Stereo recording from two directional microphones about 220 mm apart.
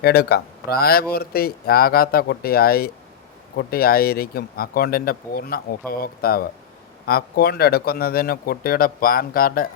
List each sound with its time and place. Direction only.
0.0 s speech: 45° left (ahead or behind)